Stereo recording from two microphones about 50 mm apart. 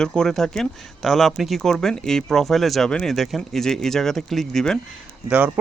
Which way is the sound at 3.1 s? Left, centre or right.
Centre.